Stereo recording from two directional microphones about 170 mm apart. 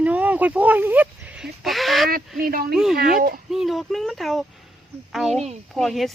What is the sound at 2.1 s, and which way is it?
Speech, 60° right (ahead or behind).